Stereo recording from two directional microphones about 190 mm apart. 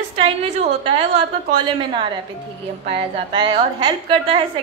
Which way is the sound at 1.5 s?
25° right (ahead or behind).